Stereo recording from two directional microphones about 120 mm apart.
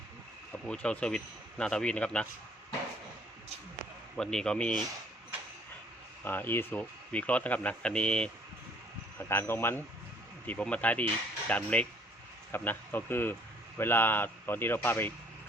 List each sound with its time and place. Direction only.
0.7 s speech: 10° left (ahead or behind)
4.2 s a man's voice: 5° left (ahead or behind)
6.2 s speech: 15° left (ahead or behind)
9.1 s speech: 20° left (ahead or behind)